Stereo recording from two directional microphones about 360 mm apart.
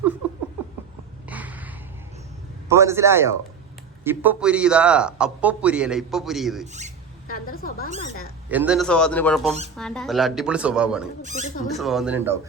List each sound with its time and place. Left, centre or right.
1.3 s a sound: centre
2.6 s a man's voice: centre
7.3 s a woman's voice: left
7.9 s speech: centre
8.4 s a man's voice: centre
11.2 s speech: centre
11.7 s a man's voice: centre